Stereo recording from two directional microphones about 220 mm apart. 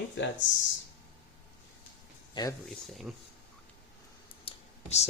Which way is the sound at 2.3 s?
15° left (ahead or behind).